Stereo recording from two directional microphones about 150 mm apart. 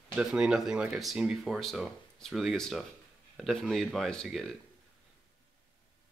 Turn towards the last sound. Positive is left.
turn(degrees=0)  # may be behind; listen again after turning